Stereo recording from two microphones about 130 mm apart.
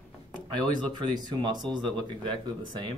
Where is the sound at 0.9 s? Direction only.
35° right (ahead or behind).